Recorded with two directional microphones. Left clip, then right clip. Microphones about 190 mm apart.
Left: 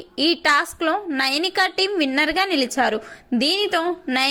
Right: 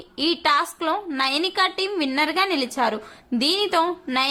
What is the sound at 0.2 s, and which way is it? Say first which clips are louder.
A woman's voice: left 2 dB; 15° left (ahead or behind).